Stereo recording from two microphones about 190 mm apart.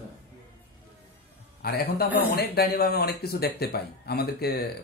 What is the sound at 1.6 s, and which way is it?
A man's voice, 55° left (ahead or behind).